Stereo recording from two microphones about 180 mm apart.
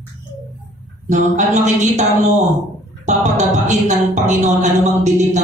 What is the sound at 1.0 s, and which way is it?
Speech, 40° right (ahead or behind).